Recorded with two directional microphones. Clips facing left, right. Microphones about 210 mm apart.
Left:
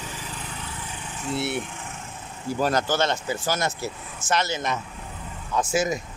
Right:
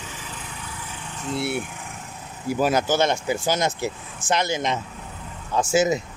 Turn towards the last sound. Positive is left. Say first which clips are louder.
# right 4 dB
turn(degrees=-25)  # may be behind; listen again after turning